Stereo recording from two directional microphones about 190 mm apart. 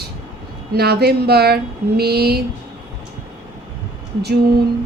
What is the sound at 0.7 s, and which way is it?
Speech, 60° right (ahead or behind).